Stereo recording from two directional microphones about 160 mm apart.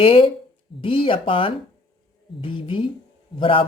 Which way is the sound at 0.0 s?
35° left (ahead or behind).